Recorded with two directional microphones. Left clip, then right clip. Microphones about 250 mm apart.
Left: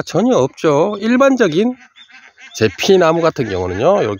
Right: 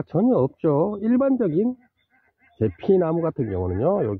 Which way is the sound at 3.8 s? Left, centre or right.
Centre.